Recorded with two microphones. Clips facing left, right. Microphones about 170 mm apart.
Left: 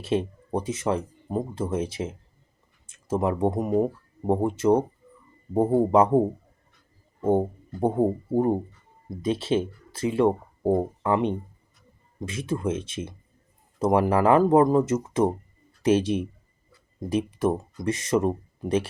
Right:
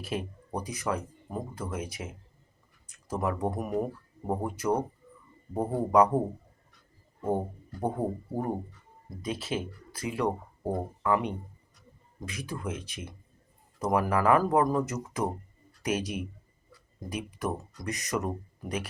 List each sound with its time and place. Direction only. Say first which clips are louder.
0.0 s speech: left 9 dB; 25° left (ahead or behind)
7.3 s speech: left 7 dB; 25° left (ahead or behind)